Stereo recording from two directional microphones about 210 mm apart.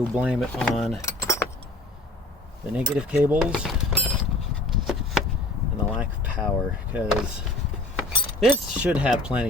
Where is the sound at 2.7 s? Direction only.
5° right (ahead or behind).